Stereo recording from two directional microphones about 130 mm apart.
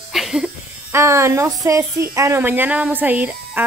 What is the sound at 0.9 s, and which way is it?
Speech, 20° right (ahead or behind).